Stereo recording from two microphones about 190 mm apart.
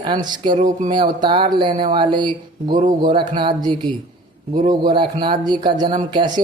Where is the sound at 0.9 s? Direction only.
25° right (ahead or behind).